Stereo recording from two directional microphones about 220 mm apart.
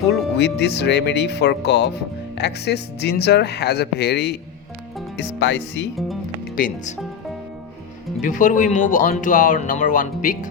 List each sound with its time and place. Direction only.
0.3 s speech: 50° left (ahead or behind)
6.6 s speech: 35° left (ahead or behind)
8.2 s speech: 35° left (ahead or behind)